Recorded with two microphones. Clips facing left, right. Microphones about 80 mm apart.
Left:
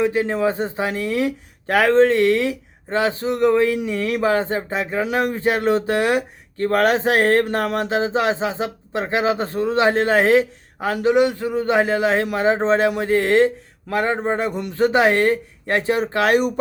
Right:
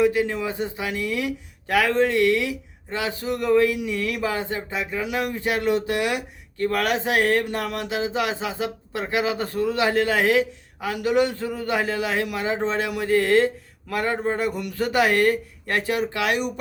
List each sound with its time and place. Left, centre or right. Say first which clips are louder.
0.0 s speech: left 2 dB; left
11.1 s a man's voice: left 4 dB; left